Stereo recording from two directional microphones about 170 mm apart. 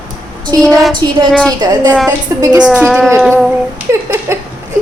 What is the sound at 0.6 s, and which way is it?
Speech, centre (ahead or behind).